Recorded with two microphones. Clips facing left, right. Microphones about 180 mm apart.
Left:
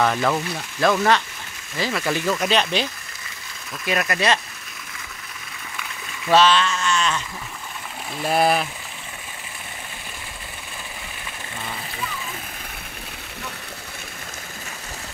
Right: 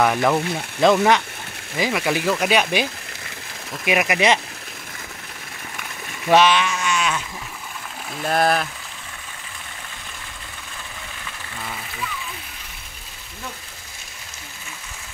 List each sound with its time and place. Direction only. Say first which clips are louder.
0.0 s speech: right 2 dB; 15° right (ahead or behind)
6.2 s speech: right 1 dB; 15° right (ahead or behind)
8.2 s speech: even; 5° left (ahead or behind)